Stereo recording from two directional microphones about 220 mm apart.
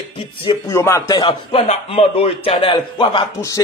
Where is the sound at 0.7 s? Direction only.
15° left (ahead or behind).